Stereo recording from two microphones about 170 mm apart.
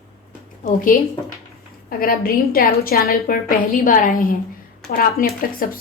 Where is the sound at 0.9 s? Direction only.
55° left (ahead or behind).